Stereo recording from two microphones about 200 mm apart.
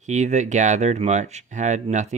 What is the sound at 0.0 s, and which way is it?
Speech, 35° right (ahead or behind).